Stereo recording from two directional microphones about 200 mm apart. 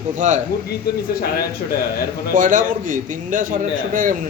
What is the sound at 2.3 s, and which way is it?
A man's voice, 40° right (ahead or behind).